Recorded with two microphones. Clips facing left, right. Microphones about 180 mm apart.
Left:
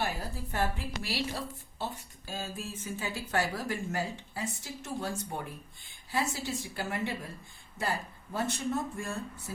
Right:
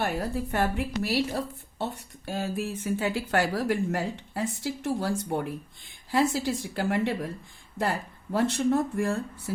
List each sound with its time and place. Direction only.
0.0 s speech: 65° right (ahead or behind)
8.3 s speech: 65° right (ahead or behind)